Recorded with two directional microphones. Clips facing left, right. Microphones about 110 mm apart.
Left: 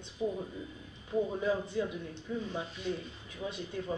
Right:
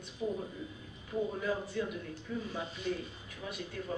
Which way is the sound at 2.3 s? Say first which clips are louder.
Left 2 dB; 20° left (ahead or behind).